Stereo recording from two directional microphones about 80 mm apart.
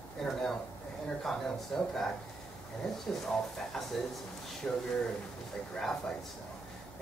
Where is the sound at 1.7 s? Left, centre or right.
Centre.